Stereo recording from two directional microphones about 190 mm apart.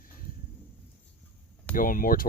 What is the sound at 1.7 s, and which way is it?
Speech, 45° left (ahead or behind).